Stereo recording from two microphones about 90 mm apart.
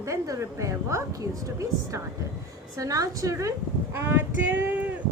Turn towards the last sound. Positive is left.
turn(degrees=-20)  # may be behind; listen again after turning